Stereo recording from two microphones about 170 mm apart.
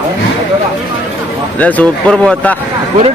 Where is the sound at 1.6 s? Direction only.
5° left (ahead or behind).